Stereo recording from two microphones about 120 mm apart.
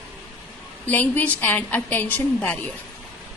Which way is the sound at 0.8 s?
15° left (ahead or behind).